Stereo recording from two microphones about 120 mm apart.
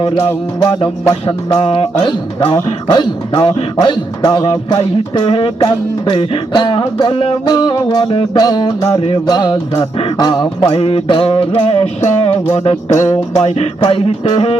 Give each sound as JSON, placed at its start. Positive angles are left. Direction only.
{"t": 0.6, "sound": "speech", "side_deg": 40}
{"t": 1.6, "sound": "music", "side_deg": 50}
{"t": 2.8, "sound": "speech", "side_deg": 35}
{"t": 5.2, "sound": "music", "side_deg": 45}
{"t": 7.4, "sound": "speech", "side_deg": 35}
{"t": 8.9, "sound": "music", "side_deg": 50}
{"t": 9.2, "sound": "speech", "side_deg": 35}
{"t": 10.8, "sound": "music", "side_deg": 55}
{"t": 12.5, "sound": "music", "side_deg": 70}
{"t": 13.1, "sound": "speech", "side_deg": 30}
{"t": 13.4, "sound": "music", "side_deg": 50}